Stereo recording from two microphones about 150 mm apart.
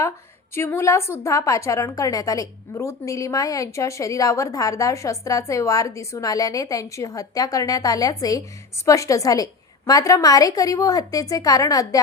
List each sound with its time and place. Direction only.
0.5 s a woman's voice: 15° left (ahead or behind)